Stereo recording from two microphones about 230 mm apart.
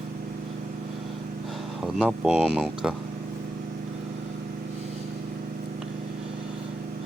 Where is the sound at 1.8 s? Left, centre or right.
Centre.